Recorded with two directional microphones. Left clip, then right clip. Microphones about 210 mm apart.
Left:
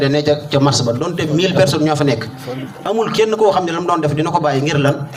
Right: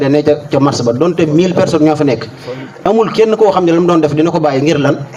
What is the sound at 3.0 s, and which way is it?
Speech, 20° right (ahead or behind).